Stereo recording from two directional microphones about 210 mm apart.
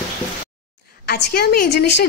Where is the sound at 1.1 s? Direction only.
45° left (ahead or behind).